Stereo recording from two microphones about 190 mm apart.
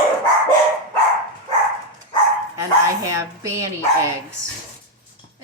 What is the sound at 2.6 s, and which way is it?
Speech, 15° right (ahead or behind).